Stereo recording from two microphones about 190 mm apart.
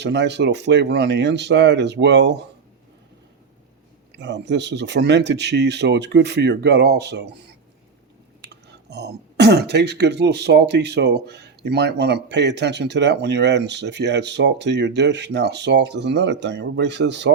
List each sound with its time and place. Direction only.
0.0 s speech: 65° right (ahead or behind)
4.2 s speech: 65° right (ahead or behind)
8.4 s speech: 65° right (ahead or behind)